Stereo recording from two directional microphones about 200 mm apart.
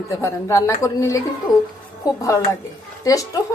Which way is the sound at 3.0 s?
15° left (ahead or behind).